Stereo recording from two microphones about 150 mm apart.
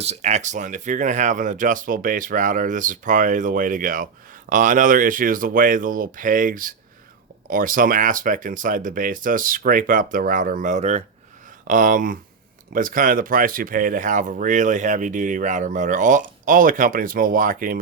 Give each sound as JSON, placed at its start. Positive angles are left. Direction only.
{"t": 0.0, "sound": "speech", "side_deg": -45}
{"t": 11.7, "sound": "speech", "side_deg": -60}